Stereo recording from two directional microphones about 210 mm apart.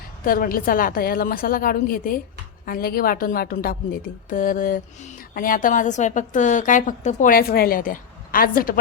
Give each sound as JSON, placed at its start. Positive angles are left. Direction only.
{"t": 0.3, "sound": "a woman's voice", "side_deg": 40}